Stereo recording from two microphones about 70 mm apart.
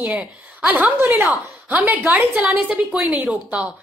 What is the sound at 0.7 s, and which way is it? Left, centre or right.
A woman's voice, right.